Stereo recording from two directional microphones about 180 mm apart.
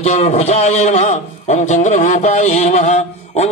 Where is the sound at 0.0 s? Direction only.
40° left (ahead or behind).